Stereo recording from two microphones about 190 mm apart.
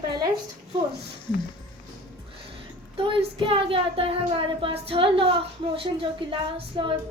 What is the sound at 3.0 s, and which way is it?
Speech, 25° right (ahead or behind).